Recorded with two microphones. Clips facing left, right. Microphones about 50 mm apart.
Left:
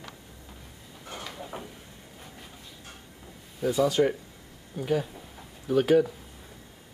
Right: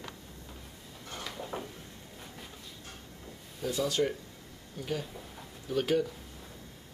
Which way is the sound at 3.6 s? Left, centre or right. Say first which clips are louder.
Left 7 dB; centre.